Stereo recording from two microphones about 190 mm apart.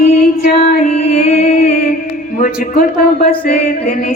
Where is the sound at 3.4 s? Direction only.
45° left (ahead or behind).